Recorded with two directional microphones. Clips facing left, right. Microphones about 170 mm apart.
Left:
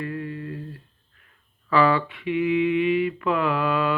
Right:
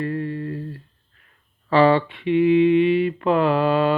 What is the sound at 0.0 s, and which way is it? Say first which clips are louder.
Humming: right 5 dB; 35° right (ahead or behind).